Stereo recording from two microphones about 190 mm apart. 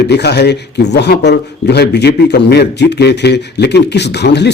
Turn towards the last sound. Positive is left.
turn(degrees=60)  # may be behind; listen again after turning